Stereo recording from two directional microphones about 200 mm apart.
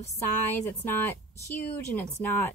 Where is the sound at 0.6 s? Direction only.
10° left (ahead or behind).